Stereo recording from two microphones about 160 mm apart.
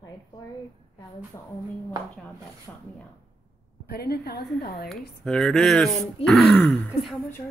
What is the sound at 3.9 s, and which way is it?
Speech, 80° left.